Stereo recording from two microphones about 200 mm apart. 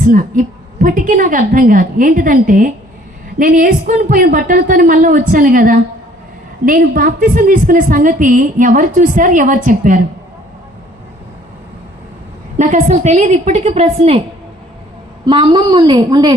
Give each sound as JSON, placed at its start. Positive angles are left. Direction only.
{"t": 0.0, "sound": "a woman's voice", "side_deg": -40}
{"t": 12.5, "sound": "a woman's voice", "side_deg": -35}
{"t": 15.3, "sound": "a woman's voice", "side_deg": -25}